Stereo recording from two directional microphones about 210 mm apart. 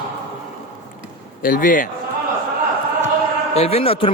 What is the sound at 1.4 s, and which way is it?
Speech, 40° left (ahead or behind).